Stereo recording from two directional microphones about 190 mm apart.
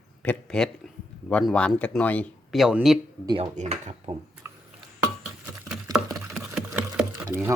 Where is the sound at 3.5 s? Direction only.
40° right (ahead or behind).